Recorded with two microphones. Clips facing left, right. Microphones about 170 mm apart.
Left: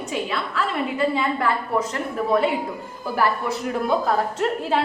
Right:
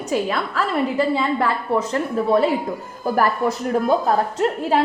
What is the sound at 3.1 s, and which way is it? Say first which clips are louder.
Speech: right 3 dB; 45° right (ahead or behind).